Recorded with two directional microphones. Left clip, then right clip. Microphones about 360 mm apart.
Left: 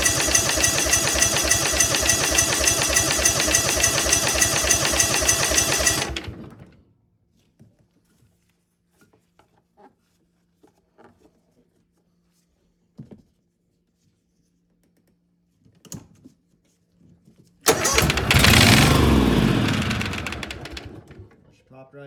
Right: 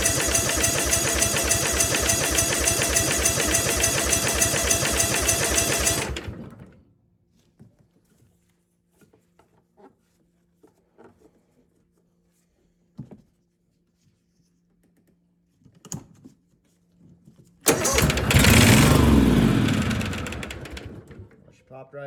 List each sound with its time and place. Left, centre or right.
0.0 s a sound: centre
9.0 s dishes: centre
10.6 s patter: centre
15.6 s typing: centre
17.1 s vehicle: centre
17.7 s vehicle: centre
21.5 s drawer open or close: centre